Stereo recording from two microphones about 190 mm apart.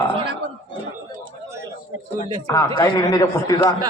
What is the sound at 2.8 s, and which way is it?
Speech, 20° left (ahead or behind).